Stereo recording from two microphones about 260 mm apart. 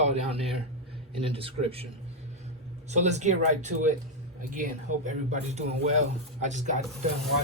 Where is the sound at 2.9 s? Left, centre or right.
Right.